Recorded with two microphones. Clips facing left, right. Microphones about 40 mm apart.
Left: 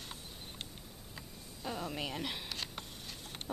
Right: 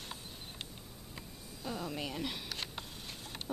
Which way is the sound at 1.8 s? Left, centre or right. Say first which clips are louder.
Even; centre.